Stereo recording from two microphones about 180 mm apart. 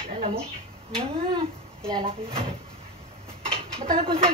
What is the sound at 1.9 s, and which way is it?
Speech, 30° right (ahead or behind).